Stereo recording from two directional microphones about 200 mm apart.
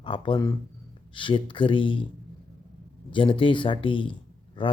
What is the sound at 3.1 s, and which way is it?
A man's voice, 25° left (ahead or behind).